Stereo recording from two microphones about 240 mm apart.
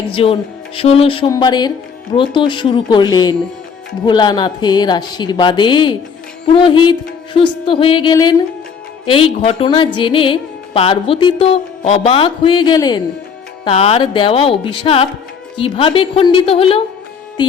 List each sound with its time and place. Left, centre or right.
0.1 s speech: left